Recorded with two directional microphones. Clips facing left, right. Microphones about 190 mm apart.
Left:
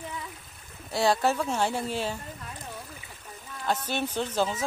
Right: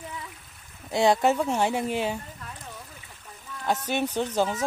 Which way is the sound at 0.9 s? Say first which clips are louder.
Right 3 dB; 20° right (ahead or behind).